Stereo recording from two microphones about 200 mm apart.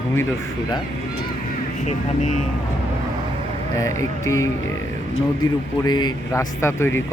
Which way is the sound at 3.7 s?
15° left (ahead or behind).